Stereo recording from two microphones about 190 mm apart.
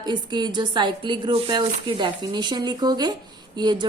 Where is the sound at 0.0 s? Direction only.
20° right (ahead or behind).